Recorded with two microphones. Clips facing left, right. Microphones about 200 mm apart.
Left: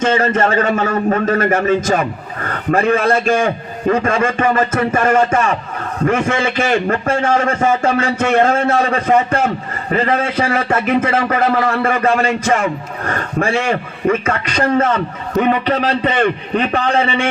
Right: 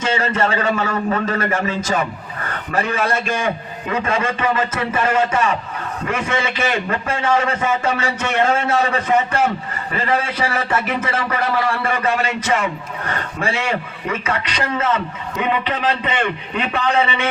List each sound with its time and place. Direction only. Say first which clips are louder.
0.0 s a man's voice: left 5 dB; 45° left (ahead or behind)